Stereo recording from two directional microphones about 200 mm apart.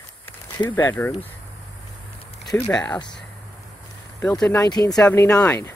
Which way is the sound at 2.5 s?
5° left (ahead or behind).